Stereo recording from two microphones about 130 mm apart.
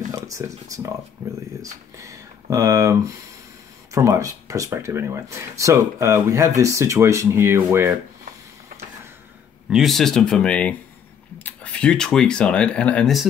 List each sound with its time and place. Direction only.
0.1 s speech: 25° right (ahead or behind)
9.7 s speech: centre (ahead or behind)